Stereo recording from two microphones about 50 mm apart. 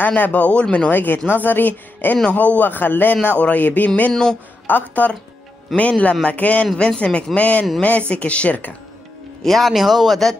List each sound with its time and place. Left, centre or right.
0.0 s speech: left
0.9 s speech: left
4.1 s speech: centre
4.6 s speech: left
6.7 s speech: centre
7.0 s speech: left
9.4 s speech: centre